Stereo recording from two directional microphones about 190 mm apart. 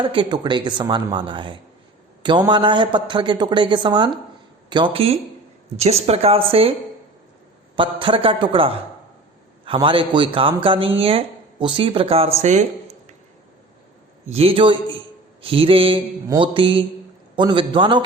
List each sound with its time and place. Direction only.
0.0 s a woman's voice: 25° right (ahead or behind)
7.8 s a woman's voice: 25° right (ahead or behind)
14.3 s a woman's voice: 30° right (ahead or behind)